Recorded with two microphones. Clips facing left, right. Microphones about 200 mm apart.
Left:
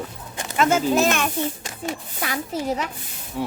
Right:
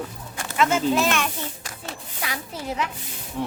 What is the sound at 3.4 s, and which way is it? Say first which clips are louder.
Speech: left 1 dB; 5° left (ahead or behind).